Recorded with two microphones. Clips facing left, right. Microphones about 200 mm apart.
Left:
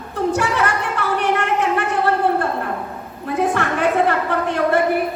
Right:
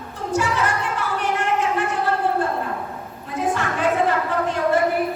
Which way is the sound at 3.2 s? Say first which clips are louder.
Left 4 dB; 65° left (ahead or behind).